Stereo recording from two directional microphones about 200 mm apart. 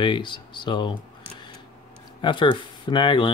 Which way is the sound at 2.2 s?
25° left (ahead or behind).